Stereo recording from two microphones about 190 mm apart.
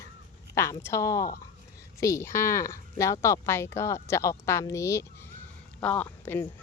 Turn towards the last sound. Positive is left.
turn(degrees=10)  # may be behind; listen again after turning